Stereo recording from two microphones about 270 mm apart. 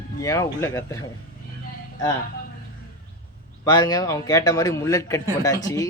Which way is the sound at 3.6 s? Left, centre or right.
Centre.